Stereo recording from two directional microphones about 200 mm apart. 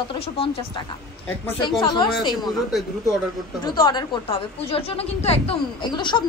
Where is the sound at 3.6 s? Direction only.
20° left (ahead or behind).